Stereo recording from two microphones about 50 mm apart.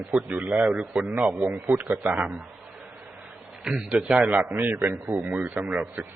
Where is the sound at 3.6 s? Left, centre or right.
Centre.